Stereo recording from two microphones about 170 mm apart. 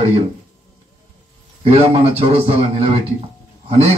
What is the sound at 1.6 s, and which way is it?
A man's voice, 35° right (ahead or behind).